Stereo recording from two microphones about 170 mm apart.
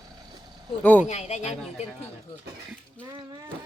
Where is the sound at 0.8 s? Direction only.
10° left (ahead or behind).